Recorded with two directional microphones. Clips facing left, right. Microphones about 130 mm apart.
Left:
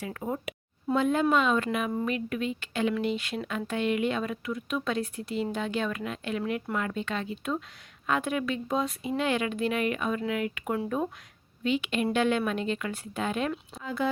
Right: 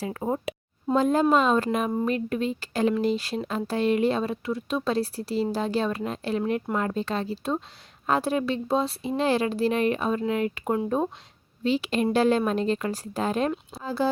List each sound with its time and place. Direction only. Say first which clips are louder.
0.0 s speech: right 5 dB; 35° right (ahead or behind)